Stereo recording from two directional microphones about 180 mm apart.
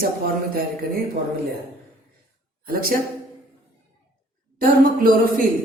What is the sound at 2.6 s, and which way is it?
Speech, 55° right (ahead or behind).